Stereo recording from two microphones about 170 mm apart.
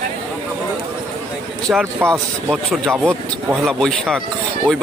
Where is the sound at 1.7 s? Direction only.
5° right (ahead or behind).